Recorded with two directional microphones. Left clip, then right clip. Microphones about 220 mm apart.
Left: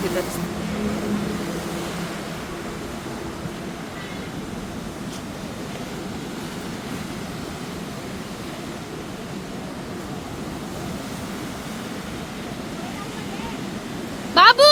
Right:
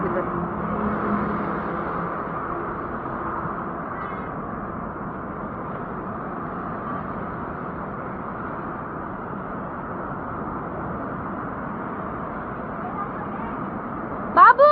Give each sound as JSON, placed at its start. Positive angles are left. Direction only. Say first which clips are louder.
{"t": 14.3, "sound": "vehicle", "louder": "even", "side_deg": 40}